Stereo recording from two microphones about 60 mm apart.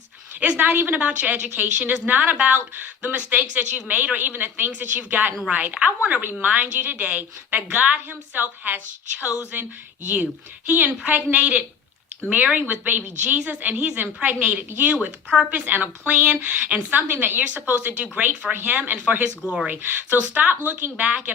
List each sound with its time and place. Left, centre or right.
0.3 s speech: right
8.4 s a woman's voice: right
10.7 s speech: right
15.3 s speech: centre
15.5 s speech: right
19.5 s speech: centre
19.7 s speech: right